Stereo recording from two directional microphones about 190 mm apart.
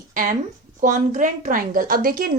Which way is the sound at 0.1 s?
45° right (ahead or behind).